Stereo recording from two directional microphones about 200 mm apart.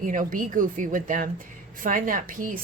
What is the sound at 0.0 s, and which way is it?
A woman's voice, 40° right (ahead or behind).